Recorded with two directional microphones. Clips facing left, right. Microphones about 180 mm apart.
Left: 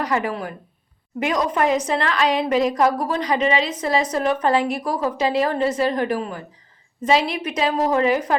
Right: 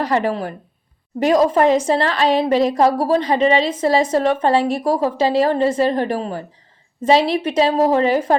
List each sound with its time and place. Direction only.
0.0 s a woman's voice: 30° right (ahead or behind)